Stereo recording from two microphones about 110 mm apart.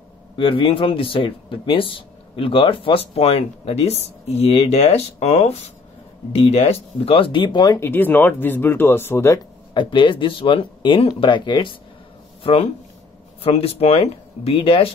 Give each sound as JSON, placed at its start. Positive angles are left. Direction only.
{"t": 0.4, "sound": "speech", "side_deg": 50}
{"t": 6.3, "sound": "speech", "side_deg": 65}
{"t": 7.7, "sound": "speech", "side_deg": 20}
{"t": 9.8, "sound": "speech", "side_deg": 50}
{"t": 13.4, "sound": "speech", "side_deg": 60}